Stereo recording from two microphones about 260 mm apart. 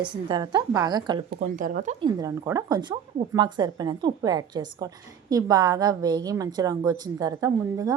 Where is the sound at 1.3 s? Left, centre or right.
Right.